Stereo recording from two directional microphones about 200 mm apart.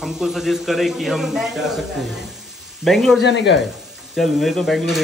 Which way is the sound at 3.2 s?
60° left (ahead or behind).